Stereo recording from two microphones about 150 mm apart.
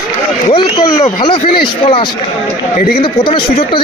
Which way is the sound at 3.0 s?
35° left (ahead or behind).